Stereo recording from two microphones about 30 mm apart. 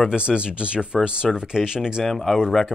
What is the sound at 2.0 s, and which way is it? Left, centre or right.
Speech, centre.